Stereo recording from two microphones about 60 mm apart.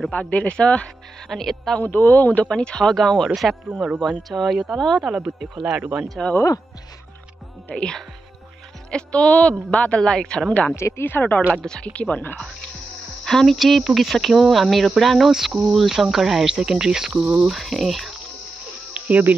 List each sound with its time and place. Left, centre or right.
0.1 s speech: left
1.3 s speech: centre
1.8 s speech: left
2.4 s a woman's voice: centre
5.1 s speech: centre
5.8 s speech: right
7.7 s a woman's voice: centre
10.7 s speech: left
11.1 s speech: left
11.5 s speech: centre
13.2 s speech: centre
17.2 s speech: right
17.5 s speech: centre
18.9 s cricket: right